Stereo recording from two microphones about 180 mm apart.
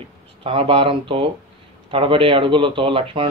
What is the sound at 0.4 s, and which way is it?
A man's voice, 30° right (ahead or behind).